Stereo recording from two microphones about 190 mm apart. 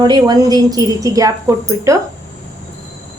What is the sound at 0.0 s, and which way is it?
A woman's voice, 20° right (ahead or behind).